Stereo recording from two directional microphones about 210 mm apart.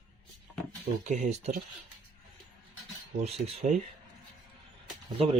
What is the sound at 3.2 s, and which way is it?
Speech, 30° right (ahead or behind).